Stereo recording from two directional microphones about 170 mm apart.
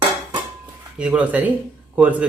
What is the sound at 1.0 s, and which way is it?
Speech, 10° right (ahead or behind).